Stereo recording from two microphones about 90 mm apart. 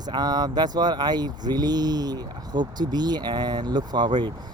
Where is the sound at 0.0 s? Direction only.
50° right (ahead or behind).